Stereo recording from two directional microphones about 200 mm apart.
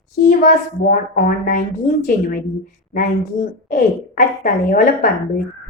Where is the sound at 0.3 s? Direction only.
40° left (ahead or behind).